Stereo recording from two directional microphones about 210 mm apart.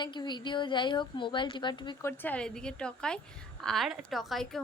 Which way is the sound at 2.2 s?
5° left (ahead or behind).